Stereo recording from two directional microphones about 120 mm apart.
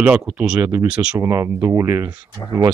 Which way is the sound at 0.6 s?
20° right (ahead or behind).